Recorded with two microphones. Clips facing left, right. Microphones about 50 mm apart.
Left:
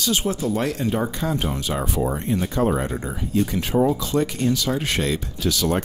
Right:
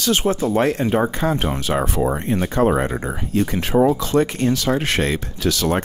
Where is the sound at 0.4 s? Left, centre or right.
Right.